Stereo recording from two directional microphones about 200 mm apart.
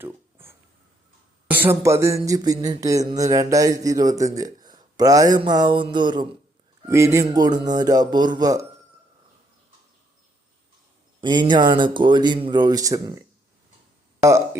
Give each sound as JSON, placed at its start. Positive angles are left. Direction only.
{"t": 0.0, "sound": "a sound", "side_deg": -10}
{"t": 5.4, "sound": "speech", "side_deg": -20}
{"t": 6.8, "sound": "a sound", "side_deg": -15}
{"t": 7.8, "sound": "speech", "side_deg": -20}
{"t": 11.2, "sound": "speech", "side_deg": -20}
{"t": 14.2, "sound": "speech", "side_deg": -15}